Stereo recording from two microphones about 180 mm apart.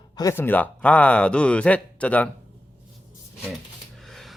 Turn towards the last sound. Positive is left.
turn(degrees=0)  # may be behind; listen again after turning